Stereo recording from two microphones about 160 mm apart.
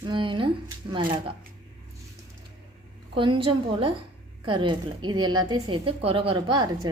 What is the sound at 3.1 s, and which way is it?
A woman's voice, 30° right (ahead or behind).